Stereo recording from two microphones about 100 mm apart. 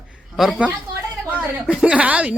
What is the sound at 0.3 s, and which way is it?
Speech, centre (ahead or behind).